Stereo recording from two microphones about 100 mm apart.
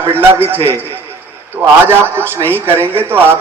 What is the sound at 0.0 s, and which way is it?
Speech, 20° right (ahead or behind).